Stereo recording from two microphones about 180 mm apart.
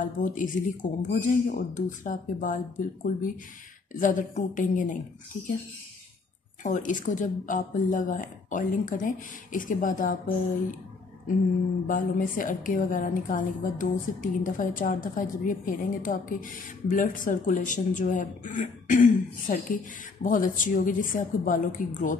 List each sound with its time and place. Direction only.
0.0 s a woman's voice: 45° left (ahead or behind)
6.6 s a woman's voice: 45° left (ahead or behind)
11.9 s a woman's voice: 50° left (ahead or behind)